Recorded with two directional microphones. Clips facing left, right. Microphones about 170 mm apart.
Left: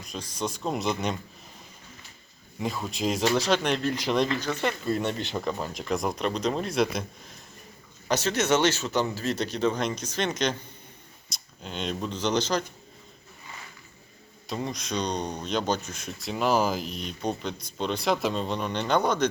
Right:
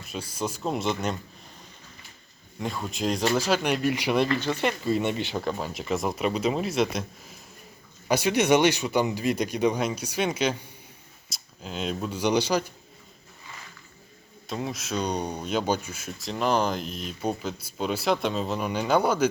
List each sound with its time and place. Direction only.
0.0 s speech: 5° right (ahead or behind)
2.6 s speech: centre (ahead or behind); by 4.7 s 15° right (ahead or behind)
4.9 s speech: 5° right (ahead or behind)
8.0 s speech: 10° right (ahead or behind)
14.4 s speech: centre (ahead or behind)